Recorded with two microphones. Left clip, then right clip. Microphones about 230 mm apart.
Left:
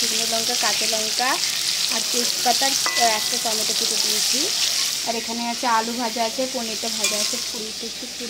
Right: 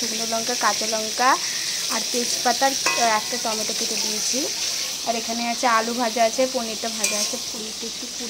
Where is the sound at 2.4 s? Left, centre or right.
Centre.